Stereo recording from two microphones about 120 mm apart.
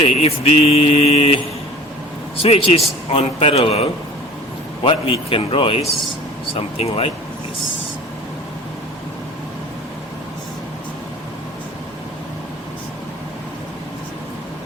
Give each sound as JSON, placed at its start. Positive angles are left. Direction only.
{"t": 0.0, "sound": "speech", "side_deg": 55}
{"t": 2.4, "sound": "a man's voice", "side_deg": 55}